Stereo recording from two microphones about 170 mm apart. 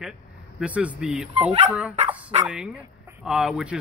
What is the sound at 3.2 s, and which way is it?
Speech, 5° right (ahead or behind).